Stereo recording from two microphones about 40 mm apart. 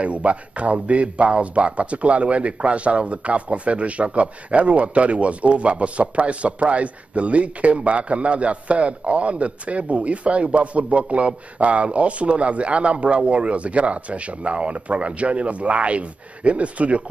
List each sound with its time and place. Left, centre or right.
0.0 s speech: right